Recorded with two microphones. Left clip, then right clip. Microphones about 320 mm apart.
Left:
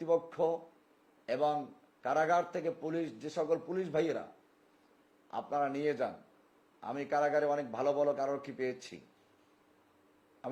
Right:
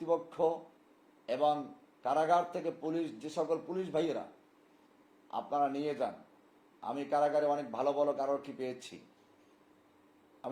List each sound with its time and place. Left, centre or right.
0.0 s a man's voice: left
5.3 s a man's voice: left
10.4 s a man's voice: left